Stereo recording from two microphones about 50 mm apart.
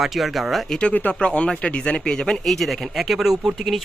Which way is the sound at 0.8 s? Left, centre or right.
Left.